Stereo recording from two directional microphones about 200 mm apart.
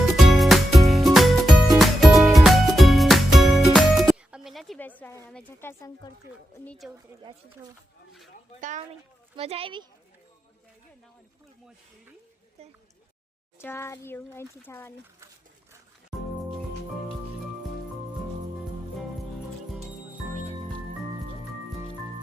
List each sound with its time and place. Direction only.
0.0 s music: centre (ahead or behind)
6.7 s a woman's voice: centre (ahead or behind)
7.2 s speech: 20° right (ahead or behind)
9.3 s speech: 30° right (ahead or behind)
13.6 s a child's voice: 10° left (ahead or behind)